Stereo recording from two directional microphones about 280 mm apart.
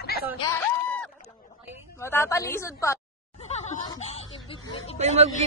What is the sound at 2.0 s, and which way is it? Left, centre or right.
A woman's voice, centre.